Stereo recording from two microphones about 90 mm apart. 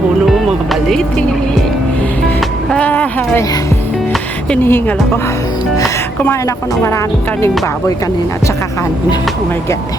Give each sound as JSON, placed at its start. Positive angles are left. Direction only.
{"t": 0.3, "sound": "music", "side_deg": 0}
{"t": 2.6, "sound": "a sound", "side_deg": 10}
{"t": 2.9, "sound": "speech", "side_deg": 20}
{"t": 4.6, "sound": "speech", "side_deg": 25}